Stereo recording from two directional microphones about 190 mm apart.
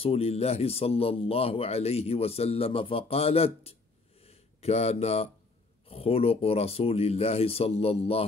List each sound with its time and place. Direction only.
0.0 s a man's voice: 30° left (ahead or behind)
4.2 s a sound: 30° left (ahead or behind)
5.9 s a man's voice: 30° left (ahead or behind)